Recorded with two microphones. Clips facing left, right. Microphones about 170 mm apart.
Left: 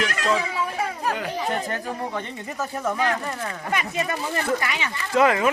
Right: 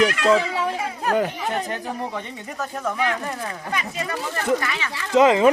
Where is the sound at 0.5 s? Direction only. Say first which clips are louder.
Right 2 dB; 75° right (ahead or behind).